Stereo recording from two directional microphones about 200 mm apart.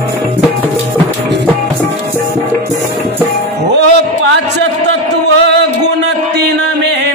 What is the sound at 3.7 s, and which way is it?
Music, 60° right (ahead or behind).